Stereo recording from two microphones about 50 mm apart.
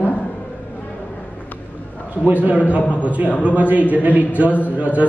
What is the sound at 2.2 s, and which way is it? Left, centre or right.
A man's voice, right.